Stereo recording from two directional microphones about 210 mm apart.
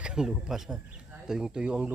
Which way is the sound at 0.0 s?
5° right (ahead or behind).